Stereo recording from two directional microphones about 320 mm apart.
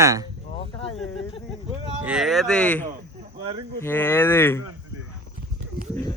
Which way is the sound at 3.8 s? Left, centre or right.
Centre.